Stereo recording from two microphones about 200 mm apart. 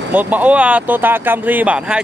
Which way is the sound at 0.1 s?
10° right (ahead or behind).